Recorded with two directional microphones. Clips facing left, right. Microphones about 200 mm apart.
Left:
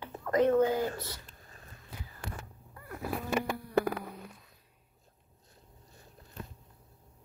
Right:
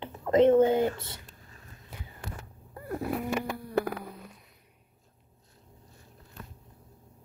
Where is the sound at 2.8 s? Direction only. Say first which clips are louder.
Right 10 dB; 30° right (ahead or behind).